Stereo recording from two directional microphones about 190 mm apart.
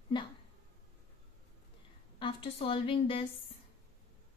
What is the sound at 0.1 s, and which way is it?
Speech, 25° left (ahead or behind).